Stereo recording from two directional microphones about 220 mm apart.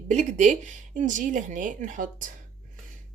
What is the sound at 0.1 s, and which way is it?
A woman's voice, 30° right (ahead or behind).